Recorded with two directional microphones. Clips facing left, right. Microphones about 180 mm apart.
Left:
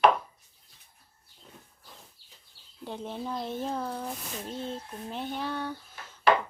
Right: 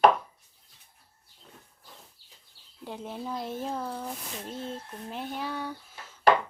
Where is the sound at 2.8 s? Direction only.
5° right (ahead or behind).